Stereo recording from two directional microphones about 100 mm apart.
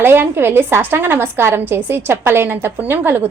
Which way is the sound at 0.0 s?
20° right (ahead or behind).